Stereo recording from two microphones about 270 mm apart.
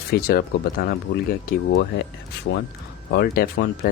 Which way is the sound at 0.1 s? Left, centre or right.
Left.